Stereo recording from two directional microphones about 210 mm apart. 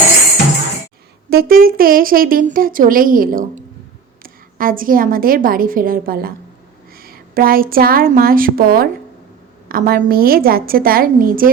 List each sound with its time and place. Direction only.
1.3 s a woman's voice: 45° right (ahead or behind)